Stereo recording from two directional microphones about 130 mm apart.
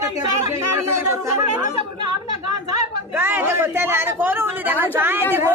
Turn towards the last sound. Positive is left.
turn(degrees=-15)  # may be behind; listen again after turning